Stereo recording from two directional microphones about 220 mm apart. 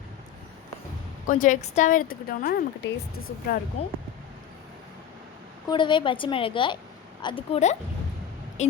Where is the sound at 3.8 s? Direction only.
30° left (ahead or behind).